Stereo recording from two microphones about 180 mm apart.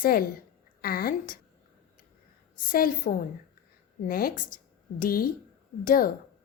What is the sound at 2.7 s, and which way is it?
A woman's voice, 50° left (ahead or behind).